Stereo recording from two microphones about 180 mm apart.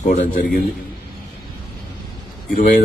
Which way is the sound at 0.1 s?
55° left (ahead or behind).